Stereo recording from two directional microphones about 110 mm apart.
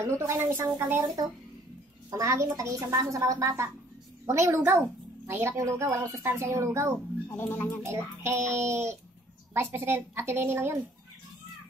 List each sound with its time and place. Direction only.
0.0 s a woman's voice: 25° right (ahead or behind)
2.0 s a woman's voice: 30° right (ahead or behind)
7.2 s speech: 20° left (ahead or behind)
7.8 s a woman's voice: 25° right (ahead or behind)